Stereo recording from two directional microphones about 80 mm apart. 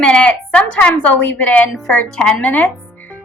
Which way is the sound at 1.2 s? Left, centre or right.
Centre.